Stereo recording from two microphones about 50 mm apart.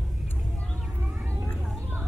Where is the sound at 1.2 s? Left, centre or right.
Right.